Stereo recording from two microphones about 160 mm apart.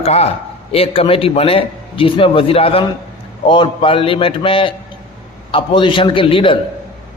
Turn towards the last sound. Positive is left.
turn(degrees=30)  # may be behind; listen again after turning